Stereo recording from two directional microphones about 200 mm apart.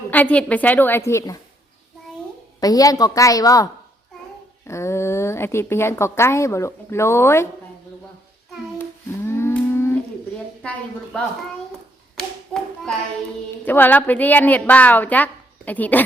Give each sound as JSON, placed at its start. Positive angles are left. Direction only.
{"t": 0.1, "sound": "a woman's voice", "side_deg": 5}
{"t": 2.6, "sound": "a woman's voice", "side_deg": 20}
{"t": 8.8, "sound": "humming", "side_deg": 10}
{"t": 10.6, "sound": "a woman's voice", "side_deg": 5}
{"t": 12.1, "sound": "hands", "side_deg": 0}
{"t": 13.7, "sound": "a woman's voice", "side_deg": 10}